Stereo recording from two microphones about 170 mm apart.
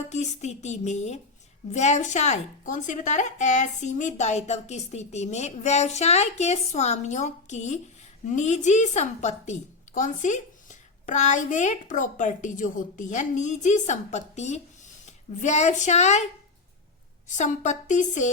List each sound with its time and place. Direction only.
0.1 s a woman's voice: 40° left (ahead or behind)
17.2 s a woman's voice: 45° left (ahead or behind)